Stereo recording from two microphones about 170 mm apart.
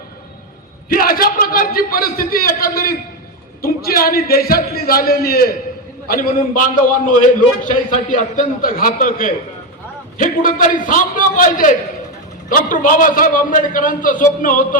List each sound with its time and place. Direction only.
0.9 s a man's voice: 60° left (ahead or behind)